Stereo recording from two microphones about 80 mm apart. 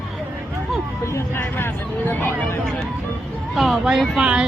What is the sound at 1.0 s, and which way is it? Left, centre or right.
Speech, left.